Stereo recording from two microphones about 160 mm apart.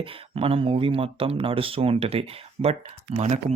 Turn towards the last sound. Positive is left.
turn(degrees=-45)  # may be behind; listen again after turning